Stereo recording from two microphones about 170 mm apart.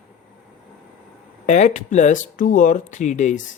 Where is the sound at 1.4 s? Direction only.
45° left (ahead or behind).